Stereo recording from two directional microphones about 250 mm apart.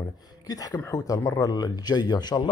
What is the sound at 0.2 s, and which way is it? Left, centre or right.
Speech, centre.